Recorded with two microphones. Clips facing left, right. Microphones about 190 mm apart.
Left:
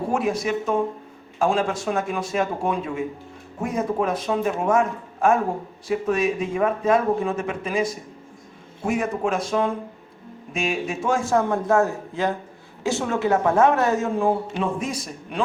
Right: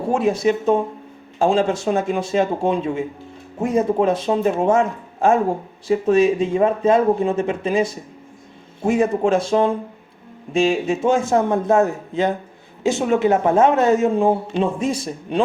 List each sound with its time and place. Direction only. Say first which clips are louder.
0.1 s speech: right 7 dB; 25° right (ahead or behind)